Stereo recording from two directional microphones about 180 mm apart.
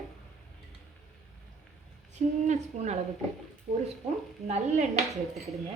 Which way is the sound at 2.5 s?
40° right (ahead or behind).